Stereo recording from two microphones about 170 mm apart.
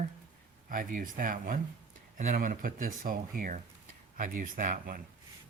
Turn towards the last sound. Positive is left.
turn(degrees=-55)  # may be behind; listen again after turning